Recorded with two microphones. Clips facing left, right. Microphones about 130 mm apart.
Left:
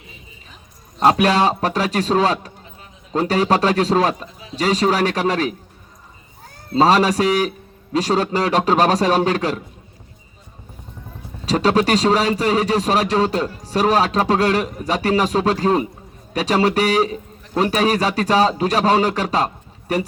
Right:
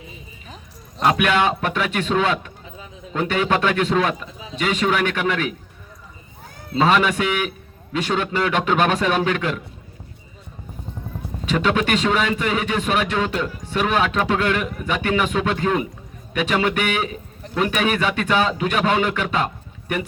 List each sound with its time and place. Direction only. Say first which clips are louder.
0.9 s speech: left 3 dB; 35° left (ahead or behind)
6.7 s speech: left 3 dB; 35° left (ahead or behind)
11.4 s speech: left 4 dB; 35° left (ahead or behind)